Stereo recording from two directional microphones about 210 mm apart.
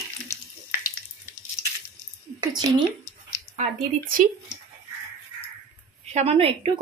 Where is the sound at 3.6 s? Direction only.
40° right (ahead or behind).